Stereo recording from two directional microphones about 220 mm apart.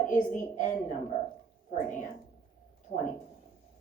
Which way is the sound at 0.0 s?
35° left (ahead or behind).